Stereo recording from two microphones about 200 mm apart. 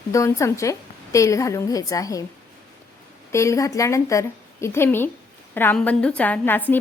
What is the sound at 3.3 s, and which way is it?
A woman's voice, 15° left (ahead or behind).